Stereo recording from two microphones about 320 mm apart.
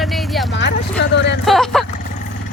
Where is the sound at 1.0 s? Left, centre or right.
Left.